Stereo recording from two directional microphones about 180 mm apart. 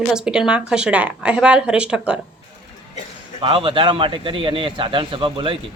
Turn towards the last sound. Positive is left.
turn(degrees=-30)  # may be behind; listen again after turning